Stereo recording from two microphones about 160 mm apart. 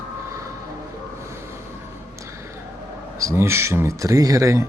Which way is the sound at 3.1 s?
20° right (ahead or behind).